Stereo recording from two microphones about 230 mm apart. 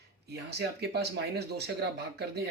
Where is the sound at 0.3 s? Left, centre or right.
Right.